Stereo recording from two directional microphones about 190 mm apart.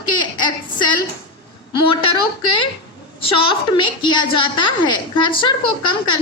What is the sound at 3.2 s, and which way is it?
A woman's voice, 25° left (ahead or behind).